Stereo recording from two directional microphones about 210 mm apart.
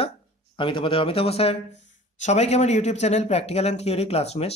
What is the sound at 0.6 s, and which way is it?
Speech, 25° left (ahead or behind).